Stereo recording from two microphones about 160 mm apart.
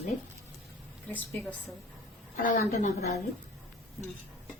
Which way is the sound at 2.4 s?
50° left (ahead or behind).